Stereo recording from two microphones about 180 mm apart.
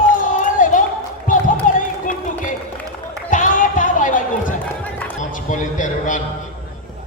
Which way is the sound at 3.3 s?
45° left (ahead or behind).